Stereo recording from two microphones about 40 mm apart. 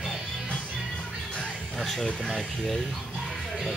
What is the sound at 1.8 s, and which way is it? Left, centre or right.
Speech, centre.